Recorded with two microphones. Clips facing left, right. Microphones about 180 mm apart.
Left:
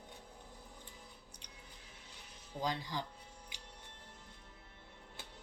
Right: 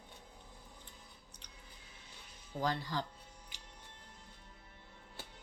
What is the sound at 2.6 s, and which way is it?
Speech, 15° left (ahead or behind).